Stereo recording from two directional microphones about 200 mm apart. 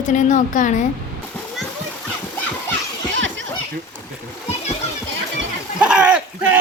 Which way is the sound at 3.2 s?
70° right (ahead or behind).